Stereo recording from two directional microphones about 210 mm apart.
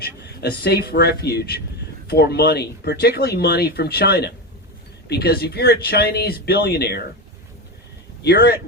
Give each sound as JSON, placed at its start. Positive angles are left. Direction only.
{"t": 0.0, "sound": "speech", "side_deg": 50}
{"t": 8.2, "sound": "speech", "side_deg": 50}